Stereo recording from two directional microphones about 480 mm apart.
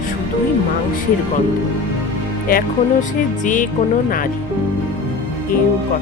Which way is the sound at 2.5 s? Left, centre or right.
Centre.